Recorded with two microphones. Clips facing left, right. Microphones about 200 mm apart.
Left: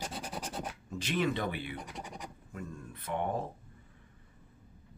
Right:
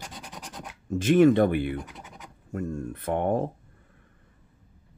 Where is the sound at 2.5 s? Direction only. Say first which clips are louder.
Right 14 dB; 50° right (ahead or behind).